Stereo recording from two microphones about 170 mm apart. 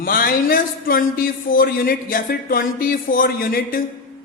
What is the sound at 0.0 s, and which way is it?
Speech, 60° left (ahead or behind).